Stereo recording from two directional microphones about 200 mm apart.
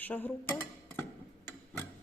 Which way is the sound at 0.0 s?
10° left (ahead or behind).